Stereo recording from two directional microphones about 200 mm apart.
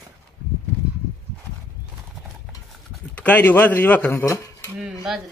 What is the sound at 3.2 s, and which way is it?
Speech, 10° left (ahead or behind).